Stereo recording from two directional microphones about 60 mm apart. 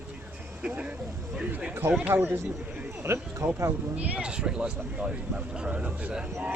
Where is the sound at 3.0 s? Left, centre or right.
Right.